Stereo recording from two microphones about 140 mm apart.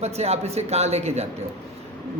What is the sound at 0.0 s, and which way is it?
A man's voice, 50° right (ahead or behind).